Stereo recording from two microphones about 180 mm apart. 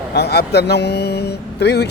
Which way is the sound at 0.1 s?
65° left (ahead or behind).